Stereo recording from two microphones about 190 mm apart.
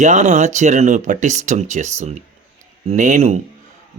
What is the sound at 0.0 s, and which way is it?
Speech, 40° right (ahead or behind).